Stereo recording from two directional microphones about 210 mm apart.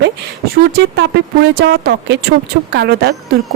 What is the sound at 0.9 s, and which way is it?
Speech, 50° right (ahead or behind).